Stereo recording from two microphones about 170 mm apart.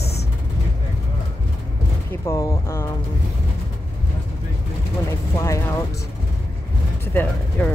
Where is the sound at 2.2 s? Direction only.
20° left (ahead or behind).